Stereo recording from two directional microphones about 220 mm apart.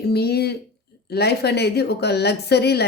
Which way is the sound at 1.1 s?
45° left (ahead or behind).